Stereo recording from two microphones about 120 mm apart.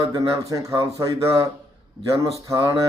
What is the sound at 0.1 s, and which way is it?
Speech, 30° right (ahead or behind).